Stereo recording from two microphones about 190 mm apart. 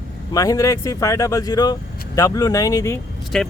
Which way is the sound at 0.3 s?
20° left (ahead or behind).